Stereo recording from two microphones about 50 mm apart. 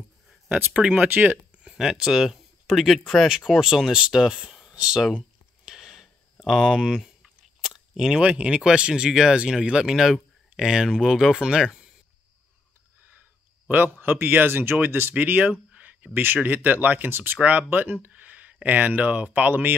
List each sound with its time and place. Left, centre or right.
0.7 s speech: right
1.1 s speech: right
1.6 s speech: centre
5.7 s a sound: centre
6.4 s speech: centre
6.7 s speech: centre
13.7 s a man's voice: right
15.1 s speech: right
15.7 s a sound: right
16.1 s speech: right
16.4 s speech: right
17.4 s speech: right
17.6 s speech: right